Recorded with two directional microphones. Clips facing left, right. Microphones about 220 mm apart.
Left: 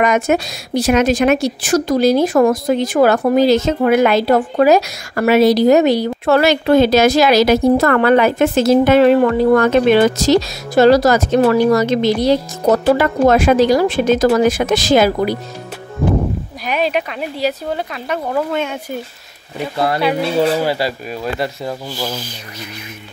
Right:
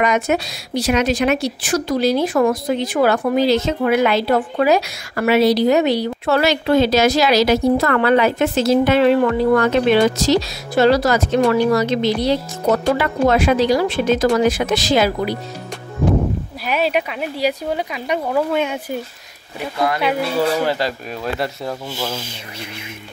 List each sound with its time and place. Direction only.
0.0 s speech: 50° left (ahead or behind)
16.6 s speech: 5° right (ahead or behind)
19.8 s speech: 35° left (ahead or behind)
20.6 s speech: 10° left (ahead or behind)
21.9 s speech: 25° right (ahead or behind)